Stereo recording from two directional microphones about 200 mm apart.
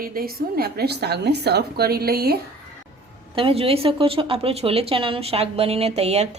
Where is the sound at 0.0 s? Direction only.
45° right (ahead or behind).